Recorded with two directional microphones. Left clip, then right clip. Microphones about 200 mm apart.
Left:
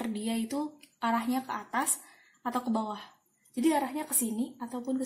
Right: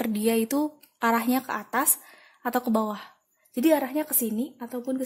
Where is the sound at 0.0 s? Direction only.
45° right (ahead or behind).